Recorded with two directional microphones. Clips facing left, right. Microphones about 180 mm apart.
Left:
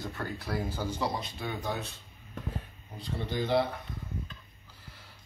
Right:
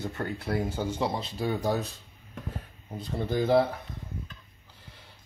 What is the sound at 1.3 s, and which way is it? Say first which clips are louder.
Speech: right 7 dB; 35° right (ahead or behind).